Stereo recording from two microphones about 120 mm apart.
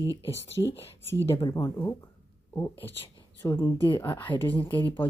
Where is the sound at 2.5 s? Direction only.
25° left (ahead or behind).